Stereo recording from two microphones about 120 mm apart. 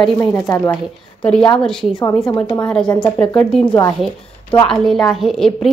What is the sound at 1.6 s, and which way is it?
A woman's voice, 5° left (ahead or behind).